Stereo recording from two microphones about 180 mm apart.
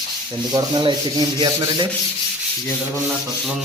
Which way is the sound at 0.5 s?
25° right (ahead or behind).